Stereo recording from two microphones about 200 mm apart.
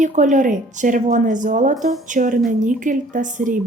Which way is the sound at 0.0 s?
40° right (ahead or behind).